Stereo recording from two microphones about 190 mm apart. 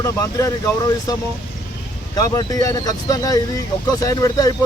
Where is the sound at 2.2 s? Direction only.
20° left (ahead or behind).